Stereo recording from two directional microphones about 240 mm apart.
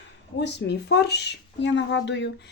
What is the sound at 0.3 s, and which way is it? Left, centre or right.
Speech, left.